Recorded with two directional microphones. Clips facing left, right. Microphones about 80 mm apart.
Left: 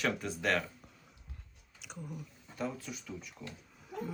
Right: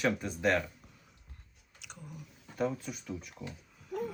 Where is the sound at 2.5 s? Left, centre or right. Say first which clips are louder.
Right 5 dB; right.